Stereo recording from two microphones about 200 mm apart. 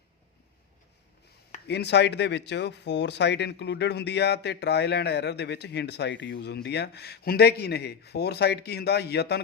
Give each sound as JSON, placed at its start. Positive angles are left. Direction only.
{"t": 1.6, "sound": "speech", "side_deg": 55}